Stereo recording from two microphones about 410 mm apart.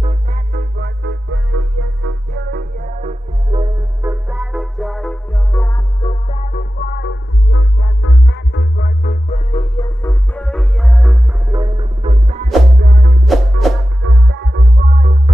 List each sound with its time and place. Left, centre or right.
0.0 s music: centre
12.8 s music: right
13.3 s music: centre
14.0 s music: right